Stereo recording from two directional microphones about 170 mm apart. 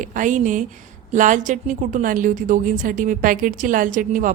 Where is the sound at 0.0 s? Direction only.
50° right (ahead or behind).